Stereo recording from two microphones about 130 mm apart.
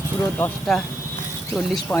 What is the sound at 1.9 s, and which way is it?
Speech, 20° left (ahead or behind).